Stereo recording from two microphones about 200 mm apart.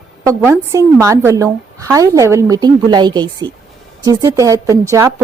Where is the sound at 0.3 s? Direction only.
15° right (ahead or behind).